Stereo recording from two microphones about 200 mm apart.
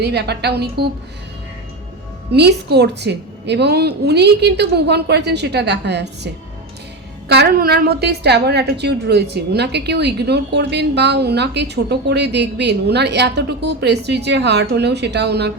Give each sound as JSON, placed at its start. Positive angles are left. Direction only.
{"t": 0.0, "sound": "a woman's voice", "side_deg": -55}
{"t": 2.3, "sound": "a woman's voice", "side_deg": -55}